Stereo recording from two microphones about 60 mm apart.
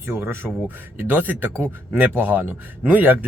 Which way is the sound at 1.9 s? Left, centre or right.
Right.